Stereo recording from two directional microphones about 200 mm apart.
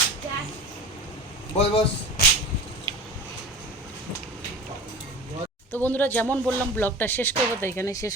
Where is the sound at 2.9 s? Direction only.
25° right (ahead or behind).